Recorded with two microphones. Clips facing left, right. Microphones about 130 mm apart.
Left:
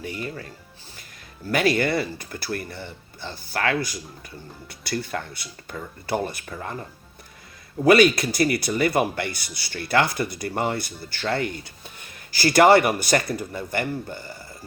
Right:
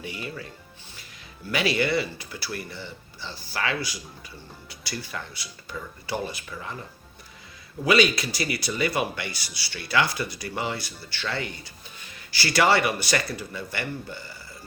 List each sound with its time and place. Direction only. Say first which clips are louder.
0.0 s speech: left 3 dB; 45° left (ahead or behind)
1.5 s speech: left 3 dB; 45° left (ahead or behind)
7.9 s speech: left 5 dB; 50° left (ahead or behind)